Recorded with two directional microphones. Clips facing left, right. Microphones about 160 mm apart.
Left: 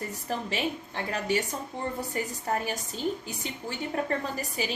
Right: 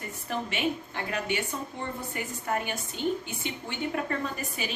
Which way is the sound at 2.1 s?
35° left (ahead or behind).